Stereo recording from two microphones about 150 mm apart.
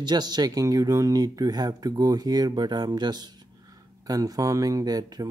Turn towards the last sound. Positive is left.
turn(degrees=-25)  # may be behind; listen again after turning